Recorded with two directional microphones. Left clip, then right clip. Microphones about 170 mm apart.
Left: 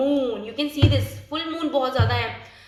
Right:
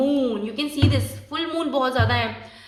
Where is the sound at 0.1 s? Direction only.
40° right (ahead or behind).